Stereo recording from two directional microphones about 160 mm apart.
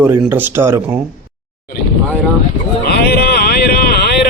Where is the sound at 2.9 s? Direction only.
80° left.